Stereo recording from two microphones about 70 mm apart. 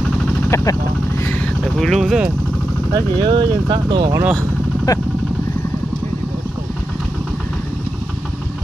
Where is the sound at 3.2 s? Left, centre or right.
Right.